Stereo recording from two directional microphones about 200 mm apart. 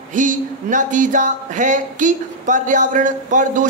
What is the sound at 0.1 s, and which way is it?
Speech, 40° right (ahead or behind).